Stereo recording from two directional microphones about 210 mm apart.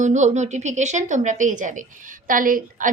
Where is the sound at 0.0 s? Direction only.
35° right (ahead or behind).